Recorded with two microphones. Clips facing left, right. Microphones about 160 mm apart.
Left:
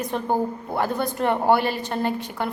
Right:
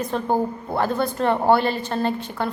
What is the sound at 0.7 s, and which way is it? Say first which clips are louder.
A woman's voice: right 2 dB; 15° left (ahead or behind).